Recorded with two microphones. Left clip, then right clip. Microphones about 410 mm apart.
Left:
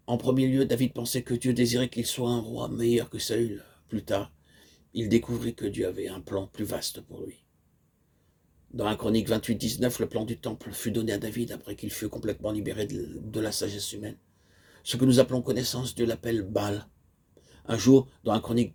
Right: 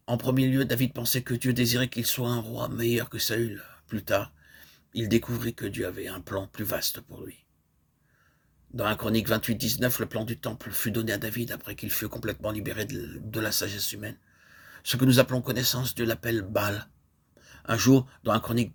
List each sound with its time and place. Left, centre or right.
0.1 s speech: right
8.7 s speech: right